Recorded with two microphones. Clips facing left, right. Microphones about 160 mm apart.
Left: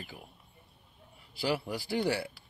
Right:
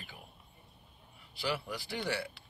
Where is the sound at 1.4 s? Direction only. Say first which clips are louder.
Left 4 dB; 35° left (ahead or behind).